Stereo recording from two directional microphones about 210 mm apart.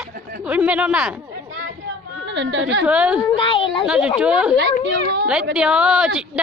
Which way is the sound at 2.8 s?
5° right (ahead or behind).